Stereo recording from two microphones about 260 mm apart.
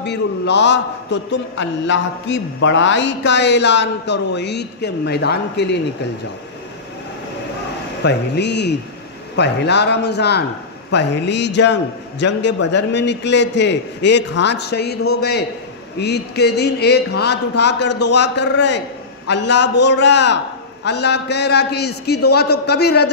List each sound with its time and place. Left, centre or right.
0.0 s a man's voice: left
8.0 s a man's voice: left
16.0 s a man's voice: left